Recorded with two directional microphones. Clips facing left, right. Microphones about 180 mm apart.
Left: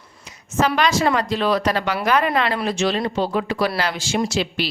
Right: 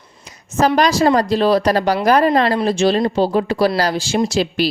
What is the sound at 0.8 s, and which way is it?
Speech, 35° right (ahead or behind).